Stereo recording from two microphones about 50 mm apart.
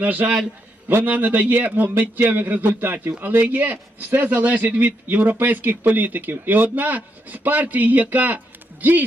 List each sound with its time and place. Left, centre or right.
0.0 s a man's voice: right
0.9 s a man's voice: right
1.1 s a man's voice: right